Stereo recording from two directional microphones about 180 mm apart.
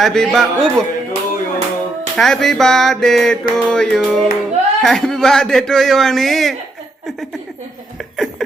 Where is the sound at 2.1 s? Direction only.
Centre (ahead or behind).